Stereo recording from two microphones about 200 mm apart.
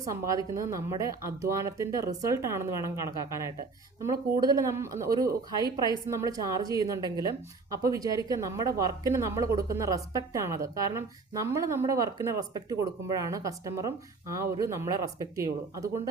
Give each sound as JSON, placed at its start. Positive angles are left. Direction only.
{"t": 0.3, "sound": "speech", "side_deg": -15}
{"t": 4.0, "sound": "speech", "side_deg": -20}